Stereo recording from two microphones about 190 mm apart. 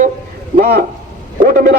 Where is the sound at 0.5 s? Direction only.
60° right (ahead or behind).